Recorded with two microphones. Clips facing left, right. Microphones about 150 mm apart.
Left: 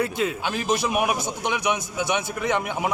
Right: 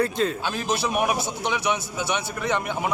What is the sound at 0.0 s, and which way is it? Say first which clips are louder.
A man's voice: right 1 dB; 10° left (ahead or behind).